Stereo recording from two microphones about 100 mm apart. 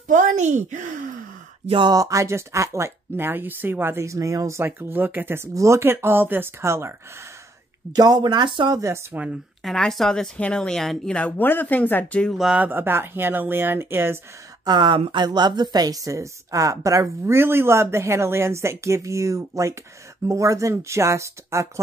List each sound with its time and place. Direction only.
1.9 s speech: 35° right (ahead or behind)
7.9 s speech: 40° right (ahead or behind)
8.7 s speech: 30° right (ahead or behind)
9.6 s speech: 5° left (ahead or behind)
12.4 s speech: 10° right (ahead or behind)
12.6 s speech: 20° right (ahead or behind)
14.6 s speech: 45° right (ahead or behind); by 21.8 s 30° right (ahead or behind)